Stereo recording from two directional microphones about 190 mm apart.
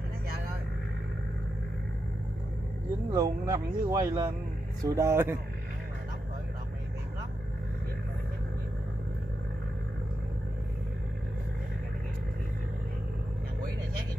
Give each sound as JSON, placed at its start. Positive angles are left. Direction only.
{"t": 3.1, "sound": "speech", "side_deg": -20}